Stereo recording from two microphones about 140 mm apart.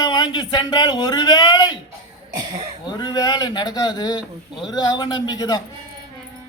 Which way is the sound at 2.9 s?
30° left (ahead or behind).